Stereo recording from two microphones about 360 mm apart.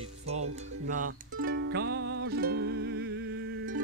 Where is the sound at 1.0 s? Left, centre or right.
Right.